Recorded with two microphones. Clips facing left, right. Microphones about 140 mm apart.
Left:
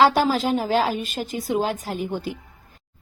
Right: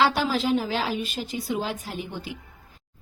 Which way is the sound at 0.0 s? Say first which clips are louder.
Left 5 dB; 45° left (ahead or behind).